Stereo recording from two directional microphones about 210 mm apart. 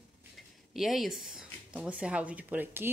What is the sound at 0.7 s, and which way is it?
Speech, centre (ahead or behind).